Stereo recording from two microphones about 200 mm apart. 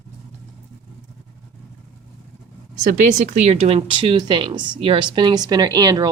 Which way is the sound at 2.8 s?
40° right (ahead or behind).